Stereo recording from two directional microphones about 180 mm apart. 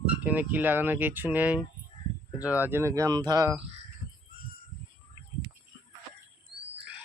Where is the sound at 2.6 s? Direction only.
15° right (ahead or behind).